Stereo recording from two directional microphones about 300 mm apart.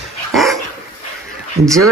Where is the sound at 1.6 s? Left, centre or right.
Right.